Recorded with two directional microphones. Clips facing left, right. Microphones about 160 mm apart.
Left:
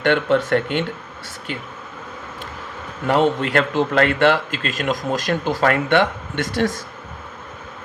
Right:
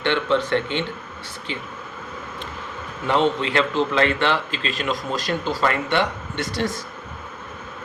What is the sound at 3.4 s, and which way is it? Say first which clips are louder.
Speech: left 2 dB; 50° left (ahead or behind).